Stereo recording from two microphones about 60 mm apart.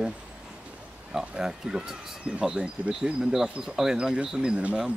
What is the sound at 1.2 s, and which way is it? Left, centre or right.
Speech, centre.